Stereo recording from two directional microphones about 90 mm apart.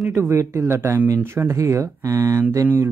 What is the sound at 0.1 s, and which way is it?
Speech, 30° right (ahead or behind).